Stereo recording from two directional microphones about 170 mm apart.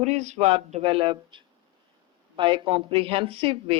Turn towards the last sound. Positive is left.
turn(degrees=-30)  # may be behind; listen again after turning